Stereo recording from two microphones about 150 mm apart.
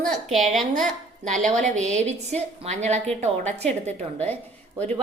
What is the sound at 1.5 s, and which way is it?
A woman's voice, 55° right (ahead or behind).